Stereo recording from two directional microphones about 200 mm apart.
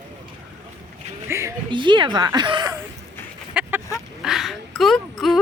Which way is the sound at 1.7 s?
25° right (ahead or behind).